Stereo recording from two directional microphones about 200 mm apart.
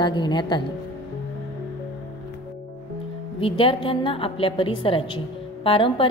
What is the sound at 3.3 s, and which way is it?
A woman's voice, 25° left (ahead or behind).